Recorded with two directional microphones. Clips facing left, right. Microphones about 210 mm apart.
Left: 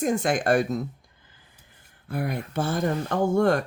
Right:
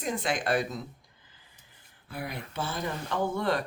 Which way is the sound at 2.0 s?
50° left (ahead or behind).